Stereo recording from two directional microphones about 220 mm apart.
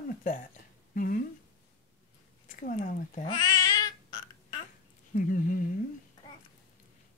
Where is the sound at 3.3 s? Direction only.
20° left (ahead or behind).